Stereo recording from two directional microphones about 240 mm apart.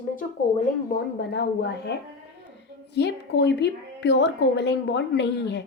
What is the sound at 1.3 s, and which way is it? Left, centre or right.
Speech, left.